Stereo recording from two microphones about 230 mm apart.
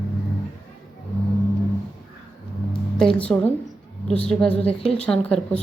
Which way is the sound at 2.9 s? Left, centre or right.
Centre.